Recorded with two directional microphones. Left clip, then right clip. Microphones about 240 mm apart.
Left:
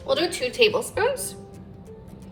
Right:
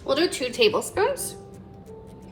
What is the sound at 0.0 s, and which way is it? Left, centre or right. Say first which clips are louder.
A woman's voice: even; right.